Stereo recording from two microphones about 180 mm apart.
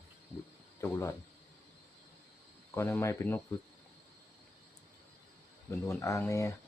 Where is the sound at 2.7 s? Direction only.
15° left (ahead or behind).